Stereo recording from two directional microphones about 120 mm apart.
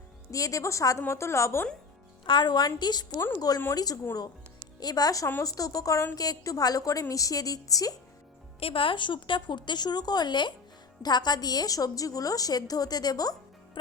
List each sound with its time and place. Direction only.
0.3 s a woman's voice: 30° left (ahead or behind)
2.2 s a woman's voice: 40° left (ahead or behind)
4.8 s a woman's voice: 35° left (ahead or behind)
8.6 s a woman's voice: 45° left (ahead or behind)